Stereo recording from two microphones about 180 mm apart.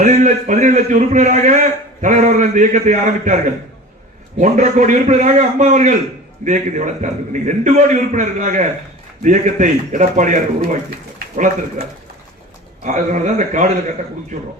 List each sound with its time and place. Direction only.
0.0 s a man's voice: 40° right (ahead or behind)